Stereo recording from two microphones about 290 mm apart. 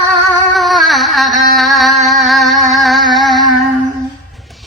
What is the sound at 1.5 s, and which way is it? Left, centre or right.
Music, centre.